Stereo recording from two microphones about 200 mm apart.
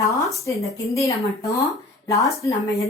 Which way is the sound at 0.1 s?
15° left (ahead or behind).